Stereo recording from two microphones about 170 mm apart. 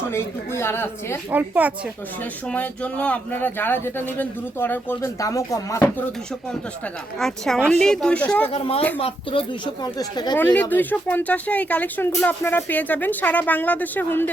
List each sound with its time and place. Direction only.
0.1 s speech: 15° left (ahead or behind)
1.3 s a woman's voice: 10° right (ahead or behind)
2.5 s speech: 5° left (ahead or behind)
7.2 s speech: centre (ahead or behind)
8.5 s speech: 35° left (ahead or behind)
10.3 s speech: 10° left (ahead or behind)